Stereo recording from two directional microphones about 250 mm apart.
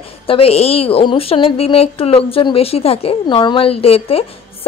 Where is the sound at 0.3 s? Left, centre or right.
Left.